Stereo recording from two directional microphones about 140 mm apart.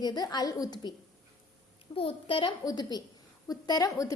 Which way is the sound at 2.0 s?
40° left (ahead or behind).